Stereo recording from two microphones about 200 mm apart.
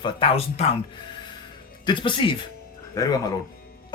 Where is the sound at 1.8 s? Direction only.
25° left (ahead or behind).